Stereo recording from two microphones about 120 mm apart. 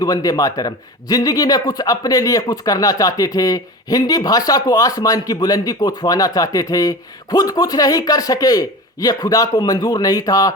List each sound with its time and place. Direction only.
0.0 s a man's voice: 30° left (ahead or behind)